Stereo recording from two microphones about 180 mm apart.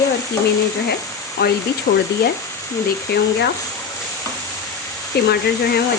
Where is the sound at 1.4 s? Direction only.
65° left (ahead or behind).